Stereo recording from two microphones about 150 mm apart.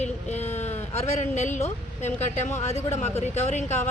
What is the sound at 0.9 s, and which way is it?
Speech, 45° left (ahead or behind).